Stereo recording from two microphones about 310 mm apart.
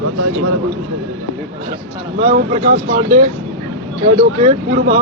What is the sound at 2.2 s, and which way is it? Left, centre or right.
Speech, right.